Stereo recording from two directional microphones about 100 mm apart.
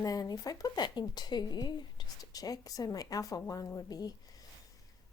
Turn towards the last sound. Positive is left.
turn(degrees=40)  # may be behind; listen again after turning